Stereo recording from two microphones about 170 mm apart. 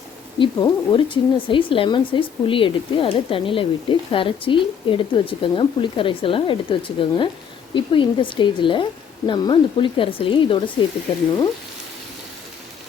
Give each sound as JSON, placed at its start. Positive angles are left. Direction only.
{"t": 0.3, "sound": "speech", "side_deg": 25}